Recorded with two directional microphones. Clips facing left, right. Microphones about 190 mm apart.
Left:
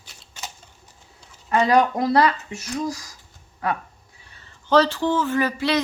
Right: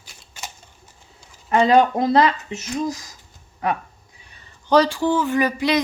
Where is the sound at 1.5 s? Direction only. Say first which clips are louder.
Right 3 dB; 25° right (ahead or behind).